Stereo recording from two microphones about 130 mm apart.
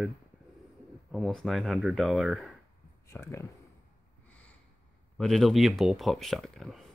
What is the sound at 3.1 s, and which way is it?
Speech, 25° left (ahead or behind).